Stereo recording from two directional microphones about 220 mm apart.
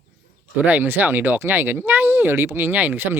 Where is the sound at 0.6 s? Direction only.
10° right (ahead or behind).